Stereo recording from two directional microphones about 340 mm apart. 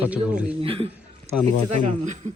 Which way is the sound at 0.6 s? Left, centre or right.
Centre.